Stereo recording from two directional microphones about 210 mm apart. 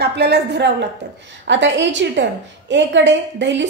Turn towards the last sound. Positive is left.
turn(degrees=-60)  # may be behind; listen again after turning